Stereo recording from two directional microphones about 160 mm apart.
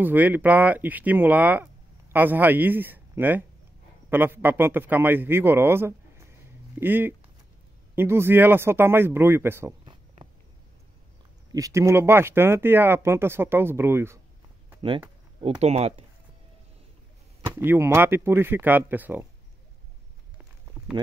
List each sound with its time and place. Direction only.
0.0 s speech: 10° right (ahead or behind)
11.5 s speech: 20° right (ahead or behind)
15.6 s speech: 40° right (ahead or behind)
17.6 s speech: 15° right (ahead or behind)